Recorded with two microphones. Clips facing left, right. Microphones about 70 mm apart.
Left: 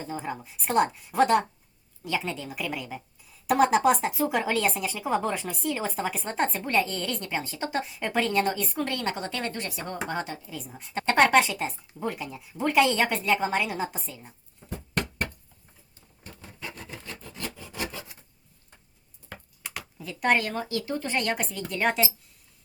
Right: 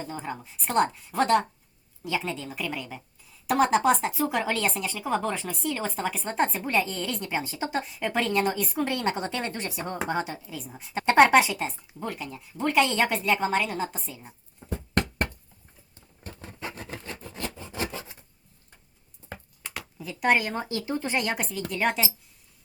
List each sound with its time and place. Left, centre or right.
0.0 s speech: centre
10.3 s speech: centre
11.0 s speech: centre
16.6 s a sound: right
17.3 s rub: right
19.7 s a sound: centre
20.4 s speech: right; by 22.0 s centre